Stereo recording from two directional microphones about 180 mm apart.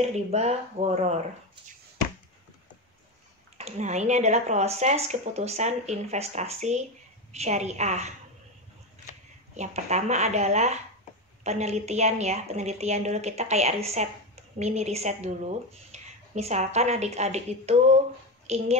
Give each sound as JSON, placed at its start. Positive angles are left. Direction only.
{"t": 0.0, "sound": "a woman's voice", "side_deg": -35}
{"t": 3.5, "sound": "a woman's voice", "side_deg": -35}
{"t": 9.6, "sound": "a woman's voice", "side_deg": -40}